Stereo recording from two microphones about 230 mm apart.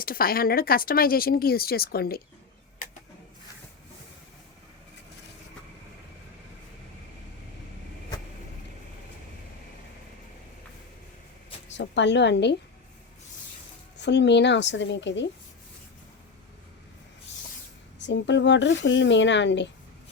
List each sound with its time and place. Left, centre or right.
0.0 s speech: left
2.8 s printer: left
11.7 s a woman's voice: left
13.9 s speech: left
18.0 s speech: left